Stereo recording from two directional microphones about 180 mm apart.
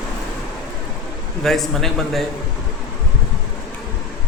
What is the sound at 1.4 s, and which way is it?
Speech, centre (ahead or behind).